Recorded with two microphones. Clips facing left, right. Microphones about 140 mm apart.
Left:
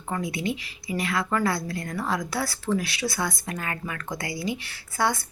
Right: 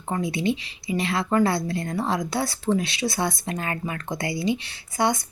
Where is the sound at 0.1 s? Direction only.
25° right (ahead or behind).